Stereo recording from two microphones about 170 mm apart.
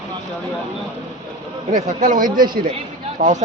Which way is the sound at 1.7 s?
50° right (ahead or behind).